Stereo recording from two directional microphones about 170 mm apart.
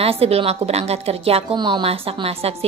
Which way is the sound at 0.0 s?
35° right (ahead or behind).